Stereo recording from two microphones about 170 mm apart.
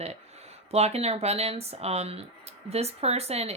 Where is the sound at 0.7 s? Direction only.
40° right (ahead or behind).